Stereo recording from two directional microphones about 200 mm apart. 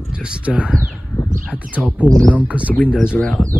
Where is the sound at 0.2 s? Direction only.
5° right (ahead or behind).